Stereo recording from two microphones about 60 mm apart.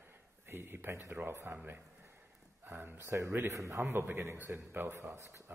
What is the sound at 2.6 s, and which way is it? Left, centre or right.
Speech, right.